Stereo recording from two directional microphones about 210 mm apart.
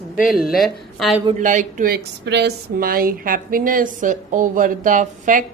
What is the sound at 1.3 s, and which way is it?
Speech, 35° right (ahead or behind).